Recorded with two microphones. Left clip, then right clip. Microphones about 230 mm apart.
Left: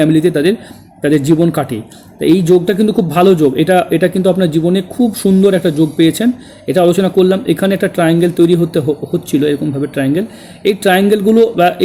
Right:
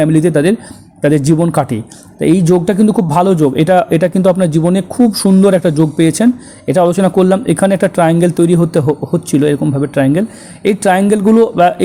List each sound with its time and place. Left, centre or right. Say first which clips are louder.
0.0 s a man's voice: even; centre